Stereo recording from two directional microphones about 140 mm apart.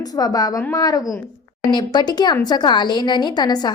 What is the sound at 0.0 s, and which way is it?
A woman's voice, 25° left (ahead or behind).